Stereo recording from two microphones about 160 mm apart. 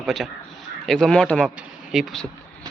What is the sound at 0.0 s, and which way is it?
A man's voice, centre (ahead or behind).